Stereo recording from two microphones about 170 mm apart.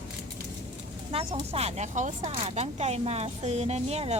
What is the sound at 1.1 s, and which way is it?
Speech, 35° right (ahead or behind).